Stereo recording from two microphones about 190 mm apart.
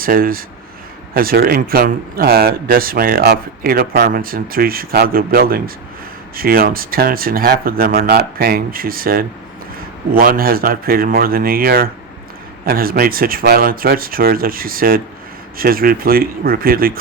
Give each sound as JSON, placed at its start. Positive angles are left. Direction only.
{"t": 0.0, "sound": "speech", "side_deg": -50}